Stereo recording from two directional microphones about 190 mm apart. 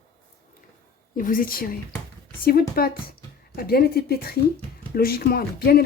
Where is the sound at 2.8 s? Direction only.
55° left (ahead or behind).